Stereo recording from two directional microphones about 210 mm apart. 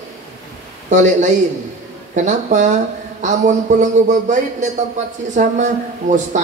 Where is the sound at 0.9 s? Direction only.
35° right (ahead or behind).